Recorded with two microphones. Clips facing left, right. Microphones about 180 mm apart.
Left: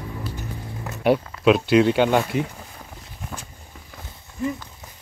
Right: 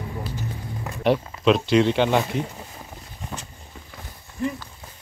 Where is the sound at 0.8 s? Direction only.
5° left (ahead or behind).